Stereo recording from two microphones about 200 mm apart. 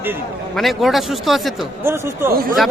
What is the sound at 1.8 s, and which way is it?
Speech, 10° right (ahead or behind).